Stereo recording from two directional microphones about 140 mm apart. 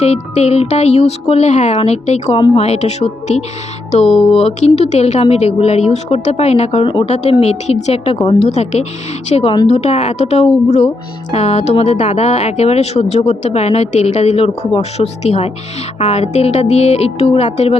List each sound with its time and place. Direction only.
0.0 s speech: 50° left (ahead or behind)